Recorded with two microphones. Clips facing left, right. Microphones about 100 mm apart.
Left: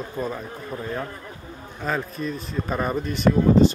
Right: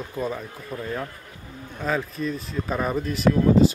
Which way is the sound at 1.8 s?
Centre (ahead or behind).